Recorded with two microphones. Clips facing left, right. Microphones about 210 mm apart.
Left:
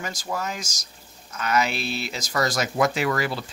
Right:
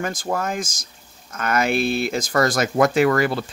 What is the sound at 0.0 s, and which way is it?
Speech, 50° right (ahead or behind).